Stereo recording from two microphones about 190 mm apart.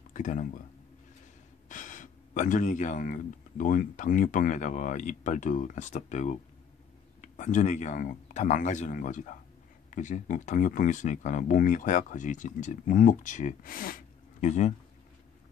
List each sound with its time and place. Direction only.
0.1 s speech: 45° left (ahead or behind)
1.7 s speech: 45° left (ahead or behind)